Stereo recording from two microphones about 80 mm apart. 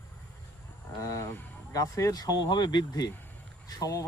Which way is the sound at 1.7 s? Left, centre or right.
Left.